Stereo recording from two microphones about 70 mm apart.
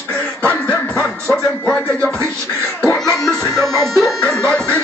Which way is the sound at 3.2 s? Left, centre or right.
Centre.